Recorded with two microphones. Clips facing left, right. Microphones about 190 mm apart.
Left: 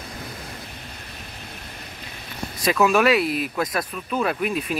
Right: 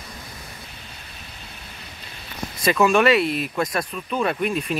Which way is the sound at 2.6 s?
Centre (ahead or behind).